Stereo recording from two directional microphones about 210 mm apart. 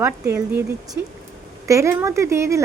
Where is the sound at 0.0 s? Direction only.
10° right (ahead or behind).